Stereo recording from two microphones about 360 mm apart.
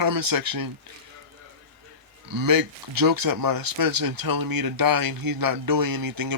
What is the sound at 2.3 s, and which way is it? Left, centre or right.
Speech, right.